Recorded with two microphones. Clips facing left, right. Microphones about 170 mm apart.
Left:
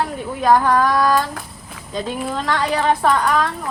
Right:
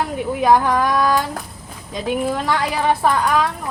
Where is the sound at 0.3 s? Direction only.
10° right (ahead or behind).